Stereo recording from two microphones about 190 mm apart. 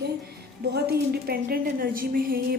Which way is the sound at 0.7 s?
55° right (ahead or behind).